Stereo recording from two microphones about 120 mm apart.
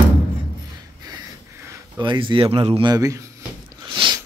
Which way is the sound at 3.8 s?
40° right (ahead or behind).